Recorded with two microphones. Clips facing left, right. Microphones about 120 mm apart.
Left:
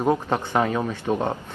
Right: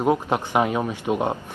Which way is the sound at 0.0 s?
10° right (ahead or behind).